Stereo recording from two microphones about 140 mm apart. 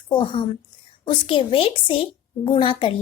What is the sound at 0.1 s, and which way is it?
A woman's voice, 35° left (ahead or behind).